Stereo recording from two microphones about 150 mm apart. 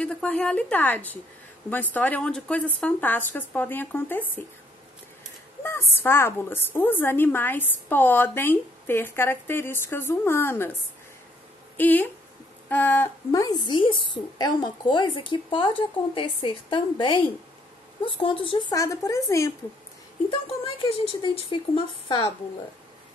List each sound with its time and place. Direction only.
0.0 s a woman's voice: 10° left (ahead or behind)
5.6 s a woman's voice: 15° left (ahead or behind)
11.7 s a woman's voice: 10° left (ahead or behind)
13.3 s a woman's voice: 25° left (ahead or behind)
18.7 s a woman's voice: 20° left (ahead or behind)
20.2 s a woman's voice: 35° left (ahead or behind)